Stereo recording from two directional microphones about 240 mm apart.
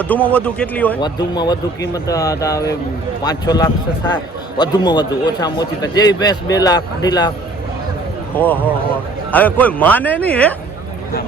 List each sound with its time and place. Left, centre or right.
0.0 s a man's voice: centre
1.0 s a man's voice: centre
8.4 s a man's voice: centre